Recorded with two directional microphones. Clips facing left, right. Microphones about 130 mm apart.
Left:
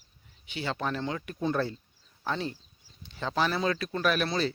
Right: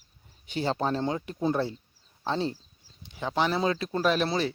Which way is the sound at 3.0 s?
15° right (ahead or behind).